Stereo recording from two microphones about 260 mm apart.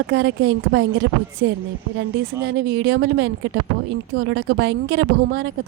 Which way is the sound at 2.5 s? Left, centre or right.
Right.